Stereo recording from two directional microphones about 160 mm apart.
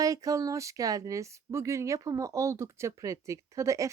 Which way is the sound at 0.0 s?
20° right (ahead or behind).